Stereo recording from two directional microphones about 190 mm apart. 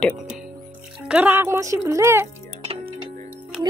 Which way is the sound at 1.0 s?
5° right (ahead or behind).